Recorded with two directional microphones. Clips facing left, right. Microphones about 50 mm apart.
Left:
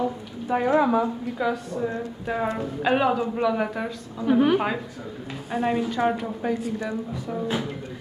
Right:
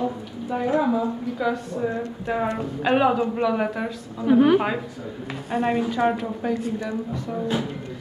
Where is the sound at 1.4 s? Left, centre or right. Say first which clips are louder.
Right 1 dB; centre.